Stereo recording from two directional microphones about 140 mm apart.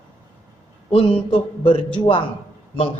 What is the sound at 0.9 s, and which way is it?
Speech, 40° left (ahead or behind).